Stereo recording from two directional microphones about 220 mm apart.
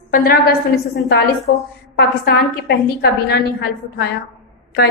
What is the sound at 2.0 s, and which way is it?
A woman's voice, 50° left (ahead or behind).